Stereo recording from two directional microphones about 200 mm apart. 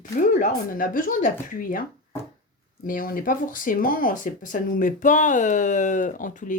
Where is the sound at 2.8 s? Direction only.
45° left (ahead or behind).